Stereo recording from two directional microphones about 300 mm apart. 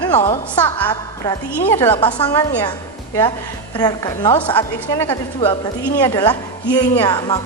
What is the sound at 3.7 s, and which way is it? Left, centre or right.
A woman's voice, centre.